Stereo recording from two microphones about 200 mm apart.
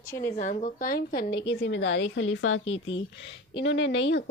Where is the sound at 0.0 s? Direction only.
15° left (ahead or behind).